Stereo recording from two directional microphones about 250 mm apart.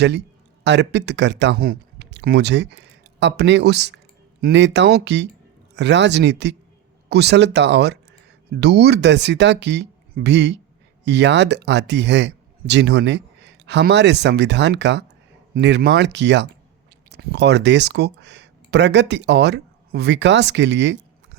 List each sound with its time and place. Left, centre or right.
0.0 s speech: right